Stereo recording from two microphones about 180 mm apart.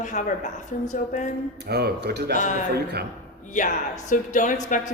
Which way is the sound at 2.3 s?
45° left (ahead or behind).